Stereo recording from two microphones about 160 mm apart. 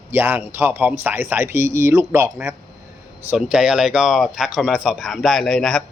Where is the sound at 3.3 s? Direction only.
5° right (ahead or behind).